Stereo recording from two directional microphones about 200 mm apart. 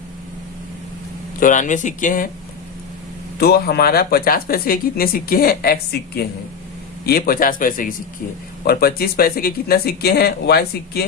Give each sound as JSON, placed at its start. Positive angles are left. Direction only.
{"t": 1.4, "sound": "speech", "side_deg": 40}
{"t": 3.3, "sound": "speech", "side_deg": 55}